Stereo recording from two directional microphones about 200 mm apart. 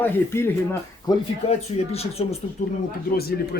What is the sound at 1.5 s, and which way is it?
Speech, 30° left (ahead or behind).